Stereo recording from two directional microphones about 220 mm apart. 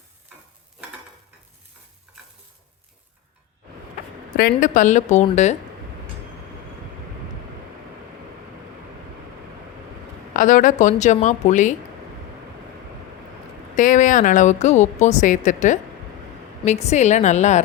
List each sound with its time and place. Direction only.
4.4 s a woman's voice: 40° left (ahead or behind)
10.3 s a woman's voice: 35° left (ahead or behind)
13.7 s a woman's voice: 35° left (ahead or behind)